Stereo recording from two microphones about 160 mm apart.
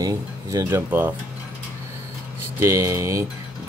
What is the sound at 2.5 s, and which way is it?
Speech, 15° right (ahead or behind).